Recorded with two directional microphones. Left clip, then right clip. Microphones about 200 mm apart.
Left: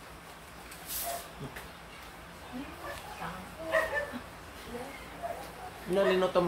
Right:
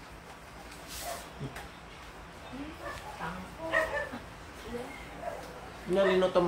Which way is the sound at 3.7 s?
45° left (ahead or behind).